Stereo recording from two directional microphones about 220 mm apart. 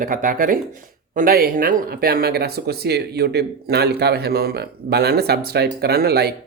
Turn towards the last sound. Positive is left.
turn(degrees=-45)  # may be behind; listen again after turning